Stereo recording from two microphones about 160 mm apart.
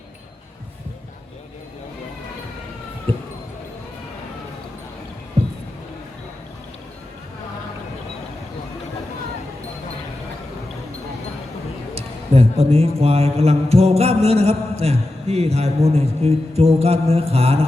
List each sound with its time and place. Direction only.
11.9 s a man's voice: 40° right (ahead or behind)